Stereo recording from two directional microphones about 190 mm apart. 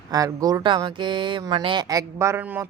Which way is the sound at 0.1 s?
20° right (ahead or behind).